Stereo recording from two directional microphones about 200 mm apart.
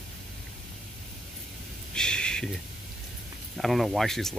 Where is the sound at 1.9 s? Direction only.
5° left (ahead or behind).